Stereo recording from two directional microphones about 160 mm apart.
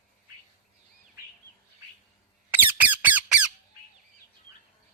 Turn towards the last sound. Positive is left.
turn(degrees=-10)  # may be behind; listen again after turning